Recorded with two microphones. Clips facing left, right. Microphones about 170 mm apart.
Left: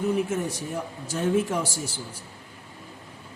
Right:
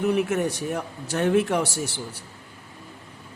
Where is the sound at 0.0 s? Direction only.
70° right (ahead or behind).